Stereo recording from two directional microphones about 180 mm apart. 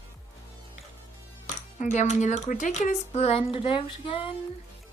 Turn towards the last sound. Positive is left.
turn(degrees=30)  # may be behind; listen again after turning